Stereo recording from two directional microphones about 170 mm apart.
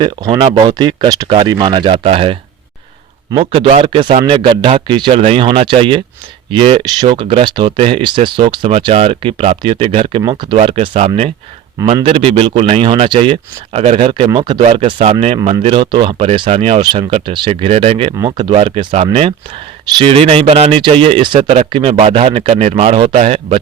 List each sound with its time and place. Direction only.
0.0 s speech: 25° right (ahead or behind)